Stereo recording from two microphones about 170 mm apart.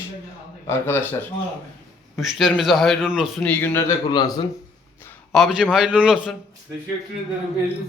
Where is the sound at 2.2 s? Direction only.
Centre (ahead or behind).